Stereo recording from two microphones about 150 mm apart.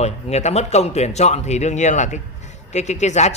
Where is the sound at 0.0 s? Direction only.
45° left (ahead or behind).